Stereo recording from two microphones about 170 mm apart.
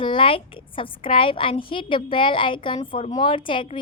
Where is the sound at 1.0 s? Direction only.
30° left (ahead or behind).